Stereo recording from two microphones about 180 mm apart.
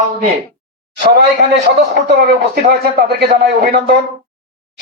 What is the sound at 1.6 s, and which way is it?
Speech, 65° right (ahead or behind).